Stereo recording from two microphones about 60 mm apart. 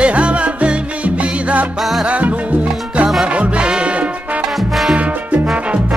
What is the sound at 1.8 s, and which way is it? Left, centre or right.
Music, centre.